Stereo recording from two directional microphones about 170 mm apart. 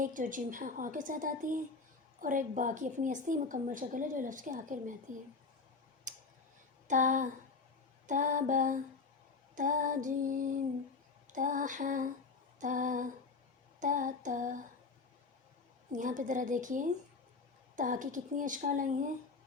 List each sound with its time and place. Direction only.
0.0 s a woman's voice: 50° right (ahead or behind)
6.1 s tick: 45° right (ahead or behind)
6.8 s a sound: 45° right (ahead or behind)
8.0 s a woman's voice: 50° right (ahead or behind)
15.9 s a woman's voice: 50° right (ahead or behind)